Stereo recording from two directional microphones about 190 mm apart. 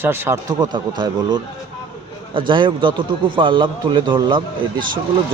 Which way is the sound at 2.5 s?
25° right (ahead or behind).